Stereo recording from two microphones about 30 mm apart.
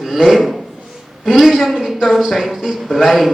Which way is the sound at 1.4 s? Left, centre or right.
Centre.